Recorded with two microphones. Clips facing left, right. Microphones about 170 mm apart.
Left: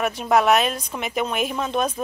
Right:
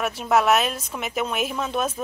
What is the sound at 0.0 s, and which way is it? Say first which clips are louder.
Speech: left 2 dB; centre (ahead or behind).